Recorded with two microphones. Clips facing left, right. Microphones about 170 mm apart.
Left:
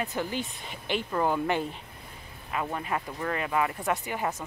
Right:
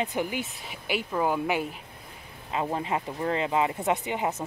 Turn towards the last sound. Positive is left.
turn(degrees=-20)  # may be behind; listen again after turning